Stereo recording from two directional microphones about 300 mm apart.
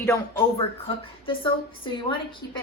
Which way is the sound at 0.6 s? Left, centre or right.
Centre.